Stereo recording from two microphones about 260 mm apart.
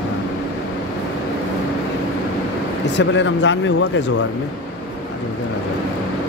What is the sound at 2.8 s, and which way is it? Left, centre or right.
Speech, left.